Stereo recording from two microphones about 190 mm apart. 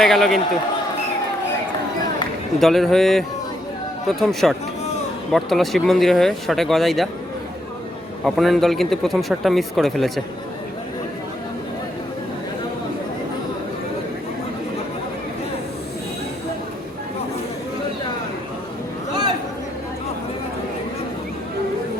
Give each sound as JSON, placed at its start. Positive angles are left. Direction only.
{"t": 0.0, "sound": "speech", "side_deg": 0}
{"t": 2.6, "sound": "speech", "side_deg": 0}
{"t": 8.2, "sound": "speech", "side_deg": 0}